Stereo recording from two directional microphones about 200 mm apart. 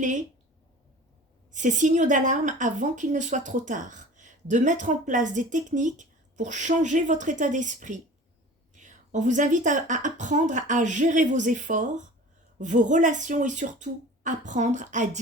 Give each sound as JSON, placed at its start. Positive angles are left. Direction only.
{"t": 0.0, "sound": "a woman's voice", "side_deg": -40}
{"t": 1.5, "sound": "a woman's voice", "side_deg": -40}